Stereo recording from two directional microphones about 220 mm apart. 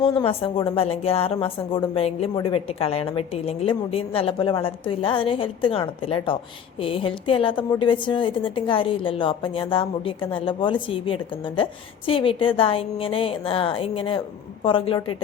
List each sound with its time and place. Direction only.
0.0 s a woman's voice: 20° left (ahead or behind)